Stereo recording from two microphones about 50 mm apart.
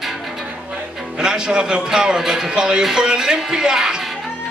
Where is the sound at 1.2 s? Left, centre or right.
Centre.